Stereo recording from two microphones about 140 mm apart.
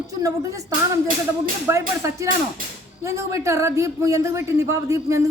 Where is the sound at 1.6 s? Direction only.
20° right (ahead or behind).